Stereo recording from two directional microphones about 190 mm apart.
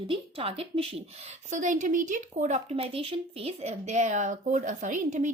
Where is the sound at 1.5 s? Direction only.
40° right (ahead or behind).